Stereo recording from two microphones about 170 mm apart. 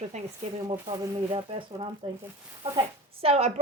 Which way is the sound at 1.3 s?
35° right (ahead or behind).